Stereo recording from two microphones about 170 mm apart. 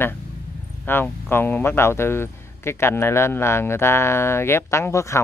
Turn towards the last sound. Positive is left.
turn(degrees=15)  # may be behind; listen again after turning